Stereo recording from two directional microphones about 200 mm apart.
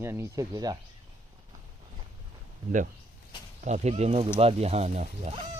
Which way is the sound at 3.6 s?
35° right (ahead or behind).